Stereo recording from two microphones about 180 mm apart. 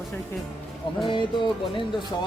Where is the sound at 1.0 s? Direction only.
25° left (ahead or behind).